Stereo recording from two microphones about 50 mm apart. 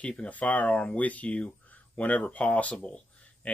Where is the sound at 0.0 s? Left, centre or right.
Left.